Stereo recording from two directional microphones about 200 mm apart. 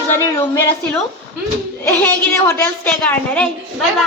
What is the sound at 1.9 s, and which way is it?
A woman's voice, 10° left (ahead or behind).